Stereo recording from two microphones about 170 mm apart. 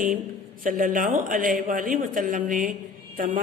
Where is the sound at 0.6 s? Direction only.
55° right (ahead or behind).